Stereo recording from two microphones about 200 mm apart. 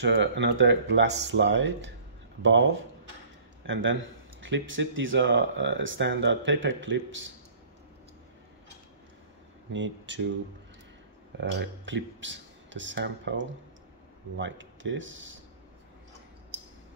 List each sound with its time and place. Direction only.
0.0 s speech: 65° right (ahead or behind)
9.7 s speech: 65° right (ahead or behind)
11.3 s speech: 60° right (ahead or behind)